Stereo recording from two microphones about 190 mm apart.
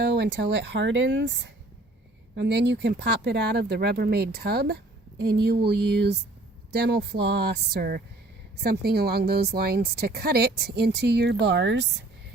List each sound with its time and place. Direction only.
0.1 s speech: 65° right (ahead or behind)